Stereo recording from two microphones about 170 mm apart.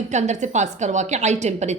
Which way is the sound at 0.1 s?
45° right (ahead or behind).